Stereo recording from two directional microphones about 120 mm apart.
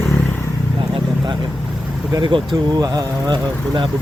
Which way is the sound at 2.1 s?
40° right (ahead or behind).